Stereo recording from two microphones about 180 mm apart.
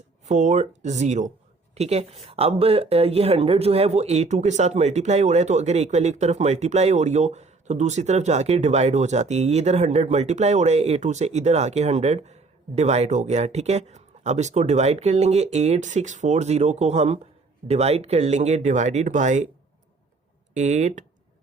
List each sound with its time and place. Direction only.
0.3 s speech: 40° right (ahead or behind)
20.5 s speech: 40° right (ahead or behind)